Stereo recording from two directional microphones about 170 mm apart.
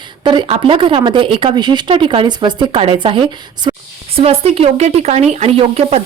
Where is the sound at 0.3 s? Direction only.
30° right (ahead or behind).